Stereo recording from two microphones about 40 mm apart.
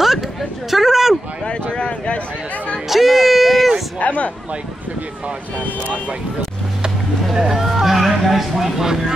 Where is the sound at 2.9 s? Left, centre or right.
Centre.